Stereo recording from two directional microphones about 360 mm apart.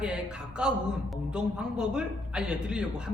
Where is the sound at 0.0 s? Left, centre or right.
Centre.